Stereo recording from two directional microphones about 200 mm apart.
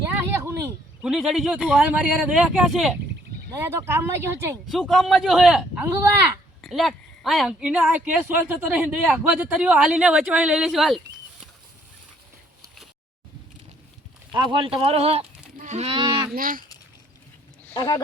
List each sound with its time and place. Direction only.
0.3 s a sound: 15° right (ahead or behind)
1.0 s speech: centre (ahead or behind)
3.5 s speech: 15° right (ahead or behind)
4.7 s speech: centre (ahead or behind)
14.3 s speech: 25° right (ahead or behind)
15.5 s a sound: 35° right (ahead or behind)
16.3 s speech: 45° right (ahead or behind)
17.7 s speech: 20° left (ahead or behind)